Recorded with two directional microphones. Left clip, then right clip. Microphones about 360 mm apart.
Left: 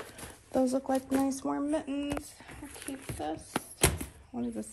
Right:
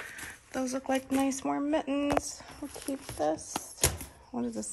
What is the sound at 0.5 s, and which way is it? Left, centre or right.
Speech, centre.